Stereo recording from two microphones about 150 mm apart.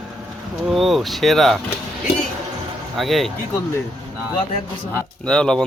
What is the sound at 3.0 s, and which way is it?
Speech, centre (ahead or behind).